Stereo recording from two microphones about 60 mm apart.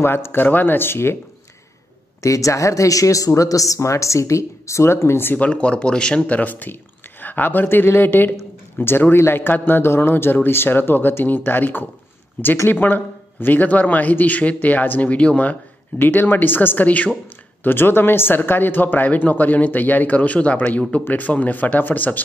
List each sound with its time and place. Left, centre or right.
0.0 s speech: left
2.2 s speech: left
5.4 s a man's voice: centre
16.0 s speech: left
17.6 s a man's voice: left